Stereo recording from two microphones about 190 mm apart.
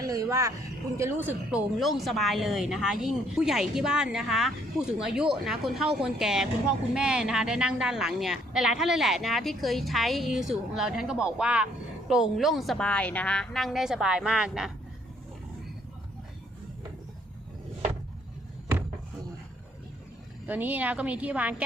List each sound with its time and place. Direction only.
0.0 s a sound: 20° right (ahead or behind)
0.9 s a woman's voice: 10° right (ahead or behind)
20.5 s a woman's voice: 10° right (ahead or behind)